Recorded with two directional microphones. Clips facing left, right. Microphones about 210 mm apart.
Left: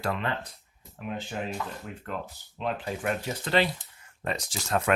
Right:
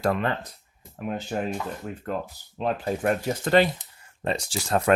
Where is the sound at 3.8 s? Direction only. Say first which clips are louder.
Right 5 dB; 30° right (ahead or behind).